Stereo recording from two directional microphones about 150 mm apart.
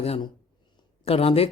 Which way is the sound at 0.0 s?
40° left (ahead or behind).